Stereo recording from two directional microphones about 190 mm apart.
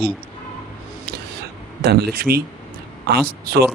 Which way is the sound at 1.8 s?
55° right (ahead or behind).